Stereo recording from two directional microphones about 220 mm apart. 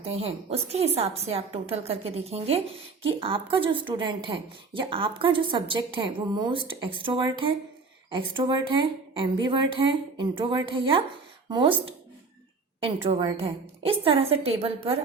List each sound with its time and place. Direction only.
0.0 s a woman's voice: 25° right (ahead or behind)